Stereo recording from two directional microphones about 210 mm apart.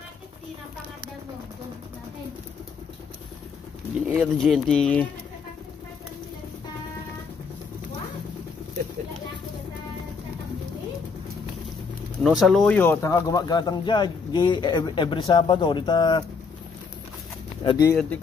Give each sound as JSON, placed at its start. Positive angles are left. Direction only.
{"t": 4.1, "sound": "speech", "side_deg": 0}
{"t": 12.2, "sound": "speech", "side_deg": 0}
{"t": 17.6, "sound": "speech", "side_deg": 20}